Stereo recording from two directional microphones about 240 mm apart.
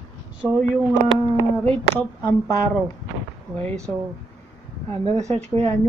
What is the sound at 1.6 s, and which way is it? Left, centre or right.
Speech, centre.